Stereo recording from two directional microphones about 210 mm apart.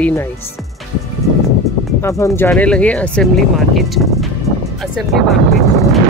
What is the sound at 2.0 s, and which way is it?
Speech, 15° left (ahead or behind).